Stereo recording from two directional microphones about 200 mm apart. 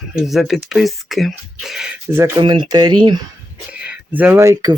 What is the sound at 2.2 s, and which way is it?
Speech, 20° right (ahead or behind).